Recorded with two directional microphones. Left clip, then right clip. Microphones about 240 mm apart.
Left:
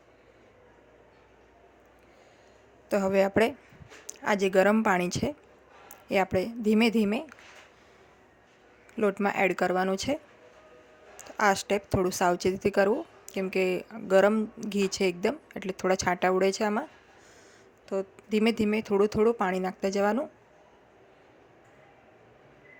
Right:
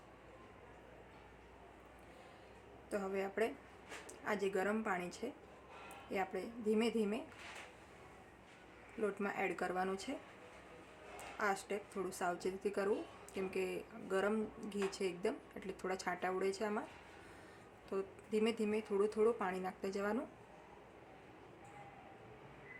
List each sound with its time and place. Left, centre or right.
2.9 s speech: left
9.0 s speech: left
11.3 s speech: left
17.8 s speech: left